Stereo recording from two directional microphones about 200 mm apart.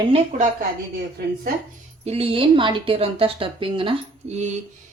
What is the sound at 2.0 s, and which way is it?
A woman's voice, 30° right (ahead or behind).